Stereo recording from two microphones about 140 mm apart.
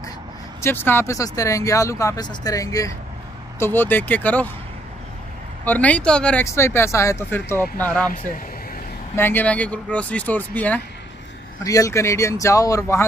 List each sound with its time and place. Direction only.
0.6 s speech: 15° left (ahead or behind)
5.7 s speech: 10° left (ahead or behind)
6.4 s speech: 20° left (ahead or behind)
9.1 s speech: 15° left (ahead or behind)
11.6 s speech: 25° left (ahead or behind)